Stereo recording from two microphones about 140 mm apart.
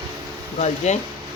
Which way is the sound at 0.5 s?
55° left (ahead or behind).